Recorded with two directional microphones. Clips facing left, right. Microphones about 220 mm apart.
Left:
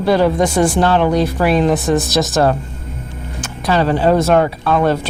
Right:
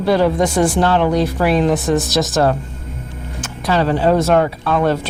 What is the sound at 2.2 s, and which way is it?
Speech, 20° left (ahead or behind).